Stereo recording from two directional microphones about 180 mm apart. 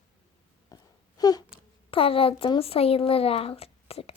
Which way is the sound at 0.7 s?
20° left (ahead or behind).